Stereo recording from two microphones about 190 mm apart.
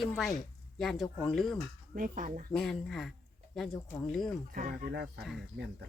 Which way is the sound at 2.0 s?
45° right (ahead or behind).